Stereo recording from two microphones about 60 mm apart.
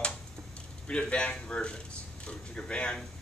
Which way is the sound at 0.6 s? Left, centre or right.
Centre.